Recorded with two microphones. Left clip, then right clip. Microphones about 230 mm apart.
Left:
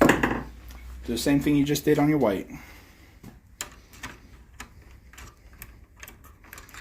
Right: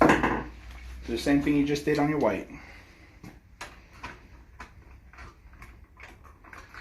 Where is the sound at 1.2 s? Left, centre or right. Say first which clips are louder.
Left 2 dB; left.